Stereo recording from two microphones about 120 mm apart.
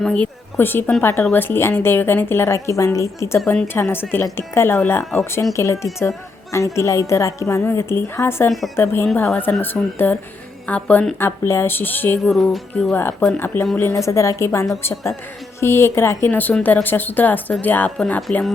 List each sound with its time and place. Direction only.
0.0 s a woman's voice: 10° left (ahead or behind)
12.2 s music: centre (ahead or behind)
12.9 s a woman's voice: 15° left (ahead or behind)